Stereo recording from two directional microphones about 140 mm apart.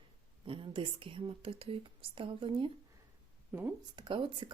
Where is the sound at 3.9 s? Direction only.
35° right (ahead or behind).